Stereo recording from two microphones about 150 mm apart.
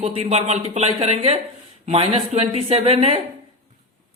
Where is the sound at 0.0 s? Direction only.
45° right (ahead or behind).